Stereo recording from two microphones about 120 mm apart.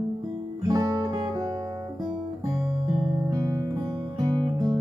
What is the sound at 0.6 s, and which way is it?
Music, 30° right (ahead or behind).